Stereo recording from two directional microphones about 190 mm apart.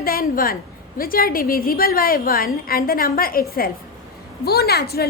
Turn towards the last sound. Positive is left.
turn(degrees=55)  # may be behind; listen again after turning